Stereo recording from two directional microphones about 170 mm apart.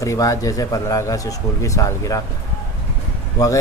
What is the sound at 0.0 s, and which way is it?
A man's voice, 20° left (ahead or behind).